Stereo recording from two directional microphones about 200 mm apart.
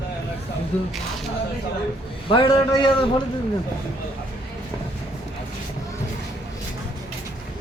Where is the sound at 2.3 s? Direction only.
25° left (ahead or behind).